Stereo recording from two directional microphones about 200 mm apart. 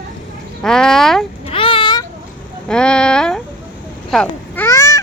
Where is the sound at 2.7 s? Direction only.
5° left (ahead or behind).